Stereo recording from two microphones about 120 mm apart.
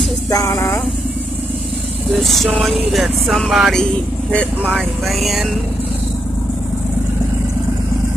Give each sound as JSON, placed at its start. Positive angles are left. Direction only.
{"t": 0.3, "sound": "speech", "side_deg": 25}
{"t": 2.1, "sound": "speech", "side_deg": 0}